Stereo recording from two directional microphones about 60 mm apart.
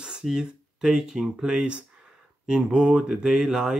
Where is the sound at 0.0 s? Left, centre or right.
Centre.